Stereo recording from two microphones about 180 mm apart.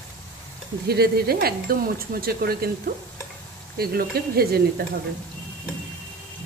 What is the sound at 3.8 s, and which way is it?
Speech, 60° right (ahead or behind).